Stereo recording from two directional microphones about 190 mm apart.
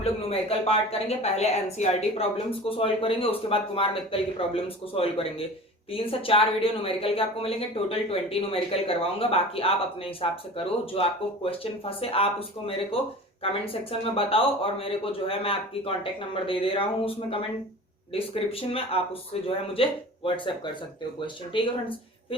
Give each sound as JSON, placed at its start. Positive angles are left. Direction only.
{"t": 0.0, "sound": "speech", "side_deg": 30}
{"t": 14.0, "sound": "speech", "side_deg": 30}
{"t": 21.5, "sound": "speech", "side_deg": 25}